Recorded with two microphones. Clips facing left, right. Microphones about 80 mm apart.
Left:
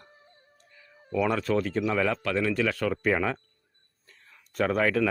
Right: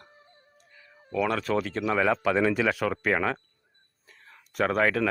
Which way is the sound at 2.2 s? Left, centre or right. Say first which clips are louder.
Right 3 dB; centre.